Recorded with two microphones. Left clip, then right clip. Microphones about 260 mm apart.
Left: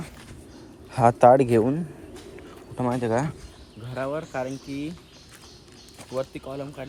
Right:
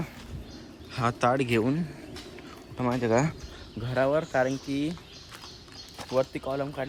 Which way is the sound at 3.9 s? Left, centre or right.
Right.